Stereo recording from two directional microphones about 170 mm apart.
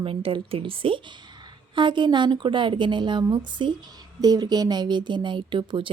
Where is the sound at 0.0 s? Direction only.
35° right (ahead or behind).